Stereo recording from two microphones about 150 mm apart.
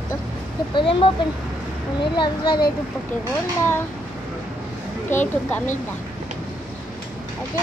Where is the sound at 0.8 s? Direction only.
35° left (ahead or behind).